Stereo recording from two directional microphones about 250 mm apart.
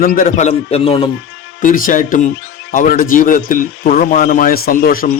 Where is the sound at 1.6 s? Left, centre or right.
Left.